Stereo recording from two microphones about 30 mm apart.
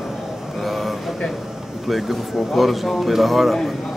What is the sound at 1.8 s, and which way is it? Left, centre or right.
A man's voice, centre.